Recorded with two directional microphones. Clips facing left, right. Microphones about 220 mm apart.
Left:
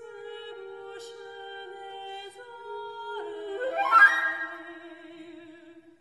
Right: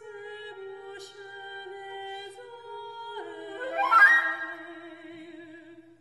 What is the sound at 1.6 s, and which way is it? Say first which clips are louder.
Humming: right 2 dB; 15° right (ahead or behind).